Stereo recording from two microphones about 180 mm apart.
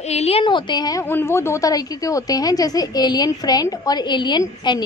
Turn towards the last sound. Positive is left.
turn(degrees=25)  # may be behind; listen again after turning